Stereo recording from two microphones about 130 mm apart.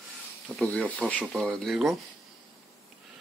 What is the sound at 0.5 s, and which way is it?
Speech, 5° left (ahead or behind).